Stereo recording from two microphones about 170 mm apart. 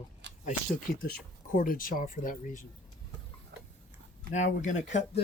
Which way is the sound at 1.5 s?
55° left (ahead or behind).